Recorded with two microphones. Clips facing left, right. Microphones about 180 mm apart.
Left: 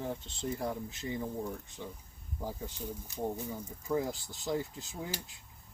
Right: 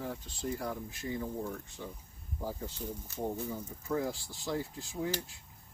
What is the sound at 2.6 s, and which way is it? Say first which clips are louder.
Speech: even; 15° left (ahead or behind).